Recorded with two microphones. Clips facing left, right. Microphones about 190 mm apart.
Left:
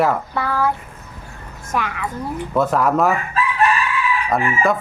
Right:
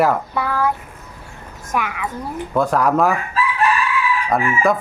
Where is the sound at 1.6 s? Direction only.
15° right (ahead or behind).